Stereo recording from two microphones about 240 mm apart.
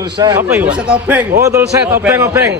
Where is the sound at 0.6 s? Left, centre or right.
Centre.